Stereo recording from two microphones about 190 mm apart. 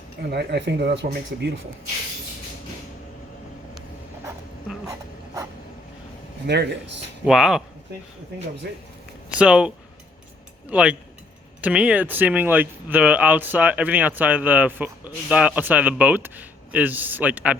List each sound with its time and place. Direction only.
0.3 s speech: 60° right (ahead or behind)
6.5 s speech: 65° right (ahead or behind)
7.3 s speech: centre (ahead or behind)
8.7 s speech: 55° right (ahead or behind)
9.4 s speech: 5° right (ahead or behind)